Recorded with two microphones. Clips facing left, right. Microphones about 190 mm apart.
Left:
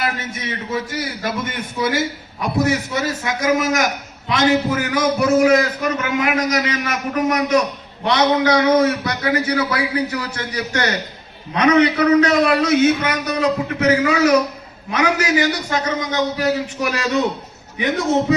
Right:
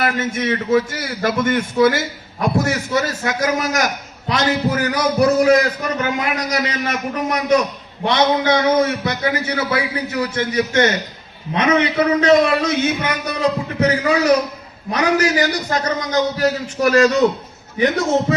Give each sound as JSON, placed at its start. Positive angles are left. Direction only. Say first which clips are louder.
{"t": 0.0, "sound": "a man's voice", "louder": "right 5 dB", "side_deg": -50}
{"t": 2.9, "sound": "a man's voice", "louder": "right 2 dB", "side_deg": -45}